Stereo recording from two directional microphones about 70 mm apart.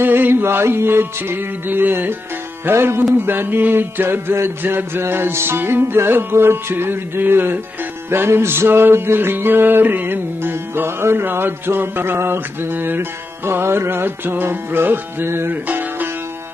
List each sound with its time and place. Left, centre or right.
0.0 s music: right